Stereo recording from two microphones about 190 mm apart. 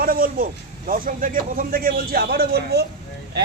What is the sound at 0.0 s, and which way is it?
A man's voice, 50° right (ahead or behind).